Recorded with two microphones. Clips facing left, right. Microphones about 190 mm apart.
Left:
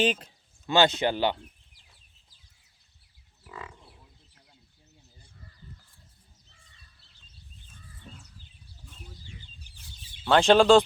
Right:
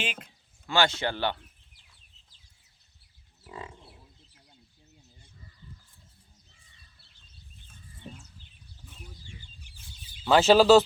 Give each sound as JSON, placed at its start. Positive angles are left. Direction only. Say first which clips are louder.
{"t": 0.0, "sound": "speech", "louder": "left 10 dB", "side_deg": 35}
{"t": 0.7, "sound": "speech", "louder": "left 4 dB", "side_deg": 20}
{"t": 3.4, "sound": "livestock", "louder": "right 1 dB", "side_deg": -25}
{"t": 8.1, "sound": "a sound", "louder": "right 5 dB", "side_deg": -65}
{"t": 9.7, "sound": "chicken", "louder": "even", "side_deg": 35}
{"t": 10.2, "sound": "speech", "louder": "even", "side_deg": -5}